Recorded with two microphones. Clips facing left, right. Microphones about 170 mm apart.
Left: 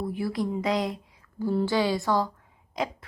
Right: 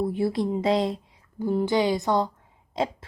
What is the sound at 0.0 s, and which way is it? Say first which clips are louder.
Speech: right 4 dB; 25° right (ahead or behind).